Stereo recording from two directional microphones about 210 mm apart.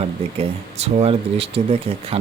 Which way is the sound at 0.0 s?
30° right (ahead or behind).